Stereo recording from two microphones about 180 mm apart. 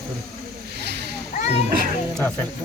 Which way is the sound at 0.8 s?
65° right (ahead or behind).